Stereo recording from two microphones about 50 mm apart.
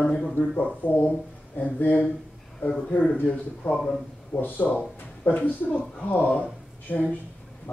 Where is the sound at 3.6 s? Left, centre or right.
Centre.